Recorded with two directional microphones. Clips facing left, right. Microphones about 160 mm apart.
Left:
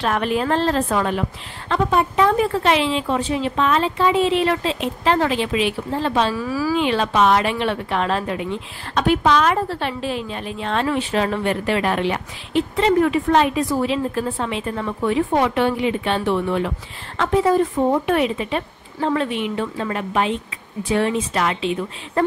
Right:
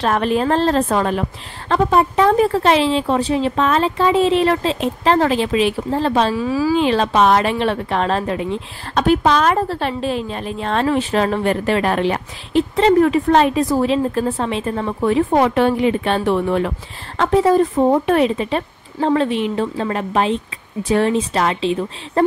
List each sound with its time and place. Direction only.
0.0 s speech: 35° right (ahead or behind)
6.3 s speech: 25° right (ahead or behind)